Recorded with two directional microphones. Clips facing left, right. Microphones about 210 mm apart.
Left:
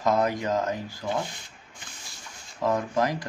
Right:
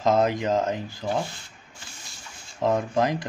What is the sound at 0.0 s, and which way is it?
Speech, 20° right (ahead or behind).